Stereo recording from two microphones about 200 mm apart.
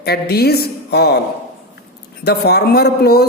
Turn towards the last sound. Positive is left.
turn(degrees=50)  # may be behind; listen again after turning